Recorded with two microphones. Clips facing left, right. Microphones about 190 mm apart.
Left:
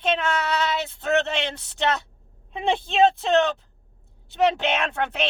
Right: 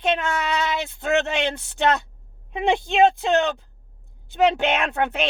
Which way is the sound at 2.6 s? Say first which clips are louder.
Right 2 dB; 15° right (ahead or behind).